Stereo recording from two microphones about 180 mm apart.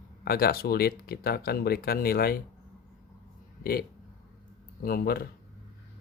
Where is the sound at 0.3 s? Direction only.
60° left (ahead or behind).